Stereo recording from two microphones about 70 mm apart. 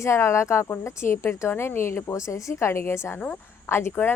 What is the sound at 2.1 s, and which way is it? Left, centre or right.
A woman's voice, left.